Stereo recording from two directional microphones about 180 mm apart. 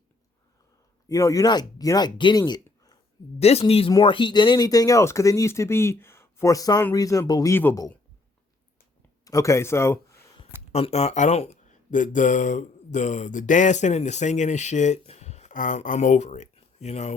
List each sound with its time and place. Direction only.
1.0 s speech: 20° left (ahead or behind)
2.4 s a sound: 15° left (ahead or behind)
3.3 s speech: 35° left (ahead or behind); by 7.9 s 15° left (ahead or behind)
9.2 s speech: 20° left (ahead or behind)
10.7 s speech: 35° left (ahead or behind)